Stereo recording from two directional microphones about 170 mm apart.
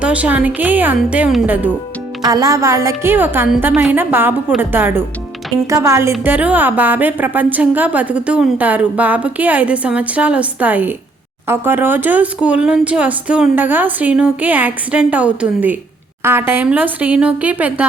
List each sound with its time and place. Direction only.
0.0 s a woman's voice: 10° right (ahead or behind)
2.2 s a woman's voice: 20° right (ahead or behind)